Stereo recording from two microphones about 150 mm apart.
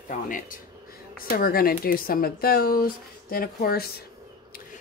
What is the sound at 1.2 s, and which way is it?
Speech, 80° left.